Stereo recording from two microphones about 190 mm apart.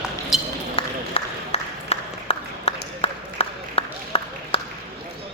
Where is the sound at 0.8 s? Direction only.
30° left (ahead or behind).